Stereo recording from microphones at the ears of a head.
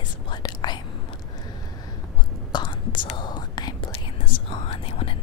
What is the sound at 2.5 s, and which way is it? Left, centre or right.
Whispering, left.